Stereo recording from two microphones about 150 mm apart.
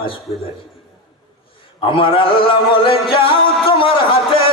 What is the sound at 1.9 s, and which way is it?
A man's voice, 35° left (ahead or behind).